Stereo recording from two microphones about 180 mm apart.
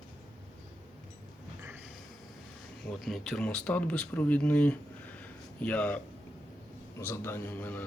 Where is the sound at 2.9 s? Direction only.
Centre (ahead or behind).